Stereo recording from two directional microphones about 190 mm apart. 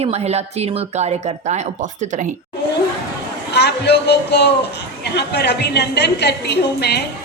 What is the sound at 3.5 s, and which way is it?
A man's voice, 60° left (ahead or behind).